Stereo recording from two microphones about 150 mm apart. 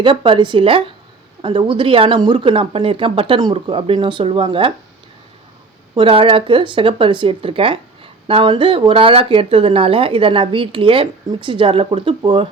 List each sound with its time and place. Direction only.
0.0 s speech: 35° right (ahead or behind)
5.9 s speech: 35° right (ahead or behind)